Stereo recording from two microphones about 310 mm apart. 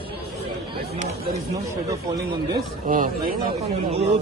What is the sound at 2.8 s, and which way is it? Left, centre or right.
Speech, right.